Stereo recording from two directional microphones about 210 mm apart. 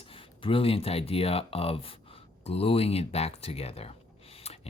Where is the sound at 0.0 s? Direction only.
25° left (ahead or behind).